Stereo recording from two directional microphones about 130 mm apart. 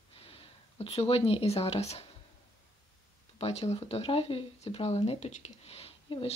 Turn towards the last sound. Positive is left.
turn(degrees=45)  # may be behind; listen again after turning